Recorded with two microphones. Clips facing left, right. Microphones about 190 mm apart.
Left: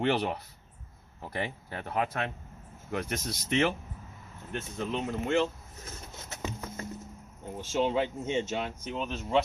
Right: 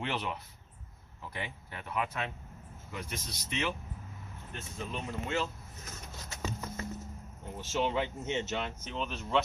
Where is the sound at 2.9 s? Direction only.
60° left (ahead or behind).